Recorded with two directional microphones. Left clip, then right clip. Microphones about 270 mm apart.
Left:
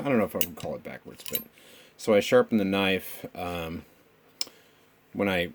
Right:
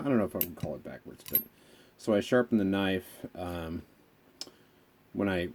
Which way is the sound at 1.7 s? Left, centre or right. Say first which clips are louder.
Left 6 dB; left.